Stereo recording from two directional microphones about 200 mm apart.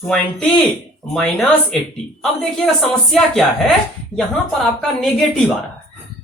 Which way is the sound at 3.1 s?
Centre (ahead or behind).